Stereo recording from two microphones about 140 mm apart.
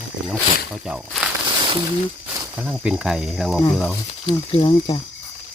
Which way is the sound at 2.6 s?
10° right (ahead or behind).